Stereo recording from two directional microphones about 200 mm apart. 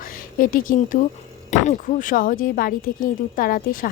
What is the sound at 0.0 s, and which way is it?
Speech, 45° left (ahead or behind).